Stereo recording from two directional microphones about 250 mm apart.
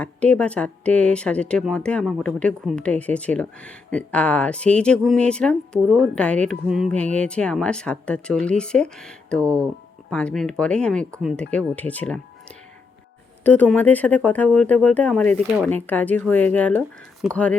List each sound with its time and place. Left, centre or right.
0.0 s speech: centre
13.4 s speech: centre